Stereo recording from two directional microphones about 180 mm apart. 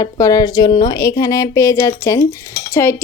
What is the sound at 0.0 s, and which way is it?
A woman's voice, 20° left (ahead or behind).